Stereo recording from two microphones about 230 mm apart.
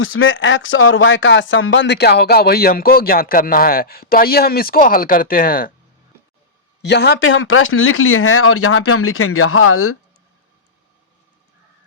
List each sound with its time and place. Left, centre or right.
0.0 s speech: left
6.8 s speech: left